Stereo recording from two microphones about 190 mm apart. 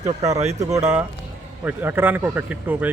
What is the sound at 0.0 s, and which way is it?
Speech, 35° right (ahead or behind).